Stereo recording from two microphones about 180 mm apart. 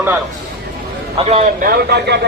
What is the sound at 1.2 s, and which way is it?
Speech, 35° right (ahead or behind).